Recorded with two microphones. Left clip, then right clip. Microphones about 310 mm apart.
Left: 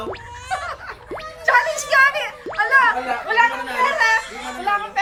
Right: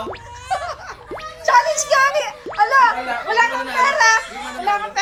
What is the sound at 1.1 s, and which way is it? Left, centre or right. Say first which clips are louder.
Music: right 2 dB; centre.